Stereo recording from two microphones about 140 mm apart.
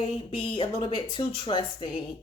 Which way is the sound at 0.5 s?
35° left (ahead or behind).